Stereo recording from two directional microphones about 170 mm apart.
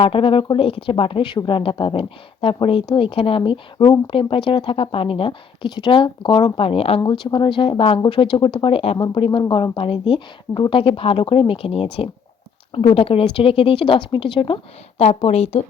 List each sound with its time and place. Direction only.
0.0 s speech: 35° left (ahead or behind)